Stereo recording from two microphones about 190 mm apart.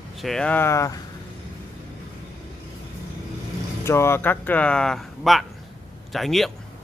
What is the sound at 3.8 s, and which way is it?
Speech, 15° left (ahead or behind).